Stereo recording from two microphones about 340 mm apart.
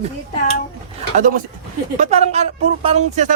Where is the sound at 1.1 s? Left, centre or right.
Right.